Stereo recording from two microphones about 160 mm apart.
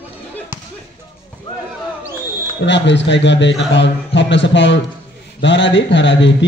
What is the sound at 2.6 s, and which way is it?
Speech, 90° left.